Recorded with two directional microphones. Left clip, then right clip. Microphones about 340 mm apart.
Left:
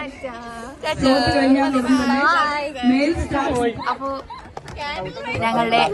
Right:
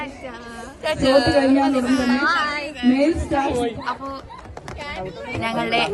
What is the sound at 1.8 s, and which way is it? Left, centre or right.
Speech, centre.